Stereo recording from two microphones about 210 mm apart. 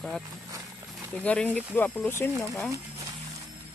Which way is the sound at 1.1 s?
5° left (ahead or behind).